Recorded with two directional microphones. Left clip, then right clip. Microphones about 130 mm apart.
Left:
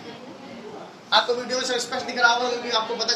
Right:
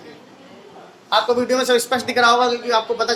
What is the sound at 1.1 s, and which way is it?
A man's voice, 60° right (ahead or behind).